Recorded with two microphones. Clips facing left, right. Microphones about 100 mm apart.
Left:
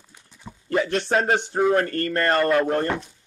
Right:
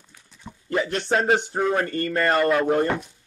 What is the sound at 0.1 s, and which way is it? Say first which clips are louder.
Dog: even; 15° left (ahead or behind).